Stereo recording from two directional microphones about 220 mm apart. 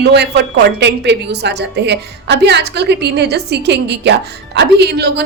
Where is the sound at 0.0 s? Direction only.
50° right (ahead or behind).